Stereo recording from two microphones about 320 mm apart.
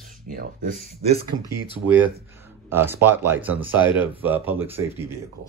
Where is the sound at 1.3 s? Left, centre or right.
Right.